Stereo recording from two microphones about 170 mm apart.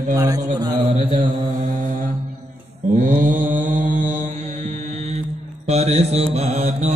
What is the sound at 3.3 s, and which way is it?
Mantra, 10° right (ahead or behind).